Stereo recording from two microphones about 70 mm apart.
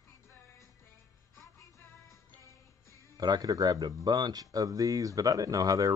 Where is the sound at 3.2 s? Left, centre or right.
Right.